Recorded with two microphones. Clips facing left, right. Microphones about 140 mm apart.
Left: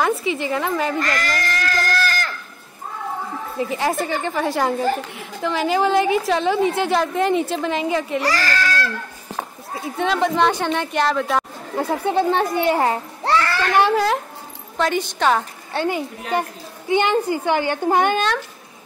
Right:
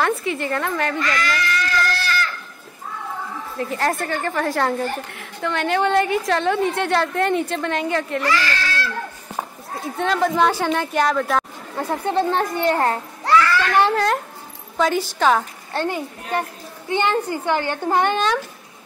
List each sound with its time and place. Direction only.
0.3 s a woman's voice: 5° left (ahead or behind)
0.9 s sheep: 45° left (ahead or behind)
3.7 s a woman's voice: centre (ahead or behind)
8.2 s speech: 40° left (ahead or behind)
9.8 s a woman's voice: centre (ahead or behind)
13.2 s children playing: 35° left (ahead or behind)
13.7 s a woman's voice: 5° left (ahead or behind)